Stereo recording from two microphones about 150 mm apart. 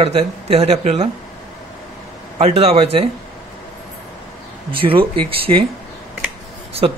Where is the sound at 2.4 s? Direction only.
40° right (ahead or behind).